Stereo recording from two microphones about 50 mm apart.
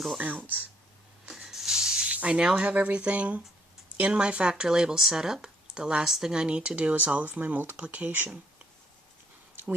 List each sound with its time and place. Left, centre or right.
0.2 s speech: right
1.2 s rub: centre
2.0 s speech: right
2.6 s speech: right
6.1 s speech: centre
6.3 s speech: centre; by 8.4 s right